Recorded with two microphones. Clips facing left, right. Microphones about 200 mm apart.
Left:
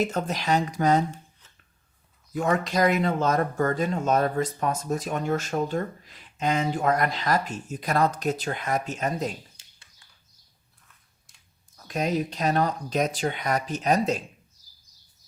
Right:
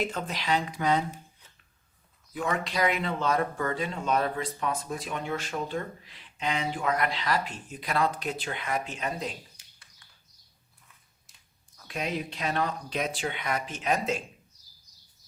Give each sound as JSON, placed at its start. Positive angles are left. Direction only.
{"t": 0.0, "sound": "speech", "side_deg": 45}
{"t": 2.3, "sound": "speech", "side_deg": 45}
{"t": 9.6, "sound": "a sound", "side_deg": 25}
{"t": 11.8, "sound": "speech", "side_deg": 40}